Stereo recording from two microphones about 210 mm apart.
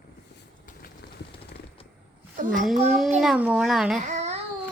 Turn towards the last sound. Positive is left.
turn(degrees=-35)  # may be behind; listen again after turning